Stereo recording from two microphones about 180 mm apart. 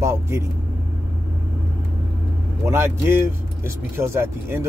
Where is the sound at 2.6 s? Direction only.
15° right (ahead or behind).